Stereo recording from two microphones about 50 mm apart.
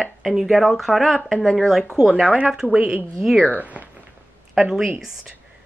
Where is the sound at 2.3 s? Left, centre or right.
Right.